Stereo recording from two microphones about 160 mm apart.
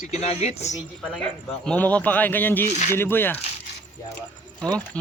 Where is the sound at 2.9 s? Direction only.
15° left (ahead or behind).